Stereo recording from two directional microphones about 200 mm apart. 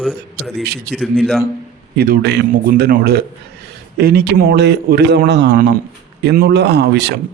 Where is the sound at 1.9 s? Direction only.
55° right (ahead or behind).